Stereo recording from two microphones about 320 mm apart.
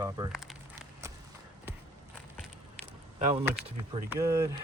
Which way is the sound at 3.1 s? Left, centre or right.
Right.